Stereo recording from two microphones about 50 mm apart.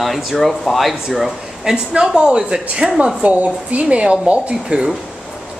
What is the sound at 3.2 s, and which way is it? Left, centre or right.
Speech, right.